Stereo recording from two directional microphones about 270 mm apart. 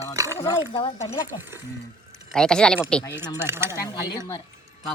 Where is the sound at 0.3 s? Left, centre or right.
Centre.